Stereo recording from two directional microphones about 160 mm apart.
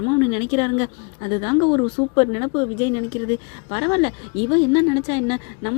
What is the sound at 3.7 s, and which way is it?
Speech, 30° left (ahead or behind).